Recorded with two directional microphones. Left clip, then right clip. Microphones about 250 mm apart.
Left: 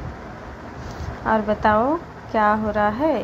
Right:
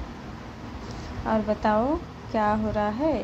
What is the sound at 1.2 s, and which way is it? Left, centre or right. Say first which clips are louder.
A woman's voice: left 6 dB; centre.